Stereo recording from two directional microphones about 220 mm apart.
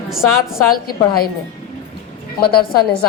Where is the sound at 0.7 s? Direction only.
40° left (ahead or behind).